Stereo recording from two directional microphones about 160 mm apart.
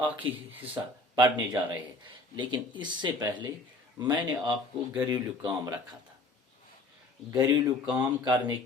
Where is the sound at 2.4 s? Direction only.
30° right (ahead or behind).